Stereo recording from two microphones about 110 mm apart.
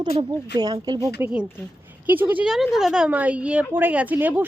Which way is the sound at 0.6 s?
35° right (ahead or behind).